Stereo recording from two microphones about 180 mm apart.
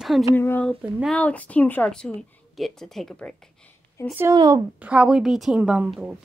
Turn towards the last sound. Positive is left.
turn(degrees=-5)  # may be behind; listen again after turning